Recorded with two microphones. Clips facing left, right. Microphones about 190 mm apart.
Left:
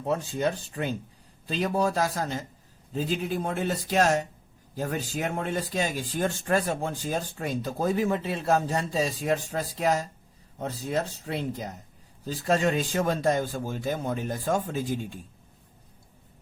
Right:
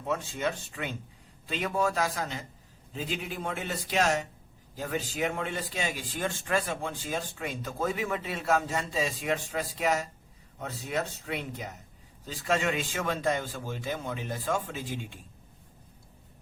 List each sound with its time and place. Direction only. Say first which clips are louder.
0.0 s speech: left 4 dB; 35° left (ahead or behind)